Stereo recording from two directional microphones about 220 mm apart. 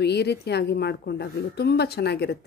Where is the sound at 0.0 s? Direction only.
50° left (ahead or behind).